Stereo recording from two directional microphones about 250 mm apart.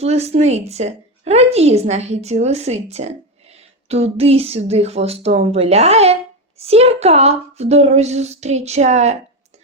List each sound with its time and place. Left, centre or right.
0.0 s a woman's voice: right